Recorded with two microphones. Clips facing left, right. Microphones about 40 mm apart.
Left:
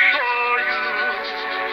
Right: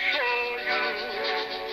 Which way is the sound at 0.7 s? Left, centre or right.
Centre.